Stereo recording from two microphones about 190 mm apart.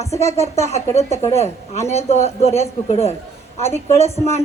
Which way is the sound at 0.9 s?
35° left (ahead or behind).